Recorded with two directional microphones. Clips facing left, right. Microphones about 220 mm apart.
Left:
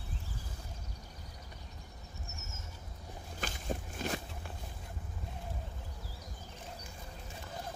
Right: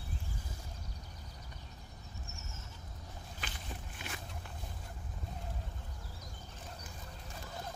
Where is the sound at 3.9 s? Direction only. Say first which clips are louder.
Left 11 dB; 40° left (ahead or behind).